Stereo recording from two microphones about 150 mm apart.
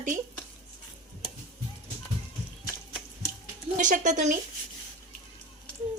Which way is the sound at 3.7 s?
60° right (ahead or behind).